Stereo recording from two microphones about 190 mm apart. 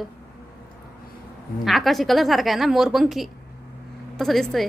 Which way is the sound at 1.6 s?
Centre (ahead or behind).